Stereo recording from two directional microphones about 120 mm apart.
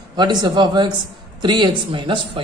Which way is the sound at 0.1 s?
35° right (ahead or behind).